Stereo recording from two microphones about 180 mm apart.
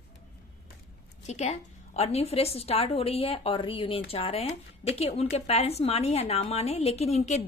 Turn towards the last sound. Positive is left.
turn(degrees=35)  # may be behind; listen again after turning